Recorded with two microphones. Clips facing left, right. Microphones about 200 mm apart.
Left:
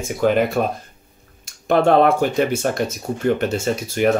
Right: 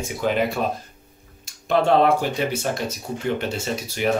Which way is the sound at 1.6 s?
55° left (ahead or behind).